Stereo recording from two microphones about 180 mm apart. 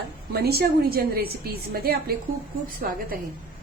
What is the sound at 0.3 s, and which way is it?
A woman's voice, 60° right (ahead or behind).